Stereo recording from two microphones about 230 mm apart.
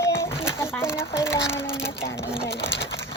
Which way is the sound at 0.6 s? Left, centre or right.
Centre.